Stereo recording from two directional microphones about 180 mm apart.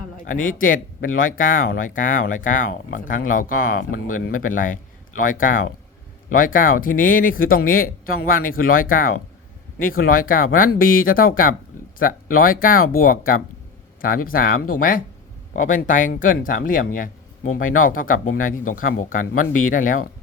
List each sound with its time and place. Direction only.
0.3 s speech: 50° left (ahead or behind)